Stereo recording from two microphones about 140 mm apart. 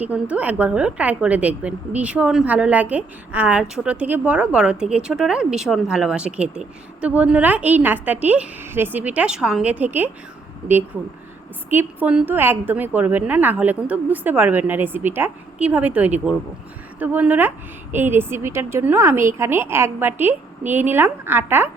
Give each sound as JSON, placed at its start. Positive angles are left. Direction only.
{"t": 0.0, "sound": "a woman's voice", "side_deg": -10}
{"t": 11.7, "sound": "a woman's voice", "side_deg": -15}